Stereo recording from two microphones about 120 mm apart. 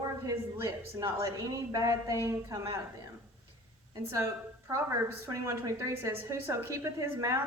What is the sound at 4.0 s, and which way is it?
A woman's voice, 25° right (ahead or behind).